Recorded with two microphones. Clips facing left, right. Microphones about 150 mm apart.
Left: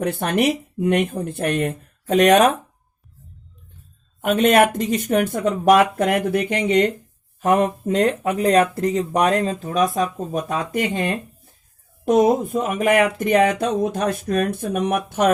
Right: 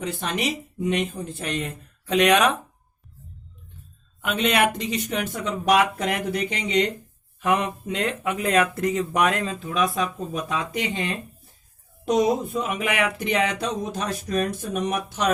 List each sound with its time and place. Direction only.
0.0 s speech: 55° left (ahead or behind)
4.2 s speech: 50° left (ahead or behind)